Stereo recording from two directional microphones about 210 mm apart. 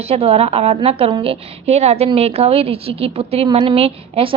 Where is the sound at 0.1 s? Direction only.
30° right (ahead or behind).